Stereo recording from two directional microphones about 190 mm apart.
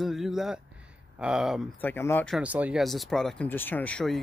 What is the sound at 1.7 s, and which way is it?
Speech, 10° left (ahead or behind).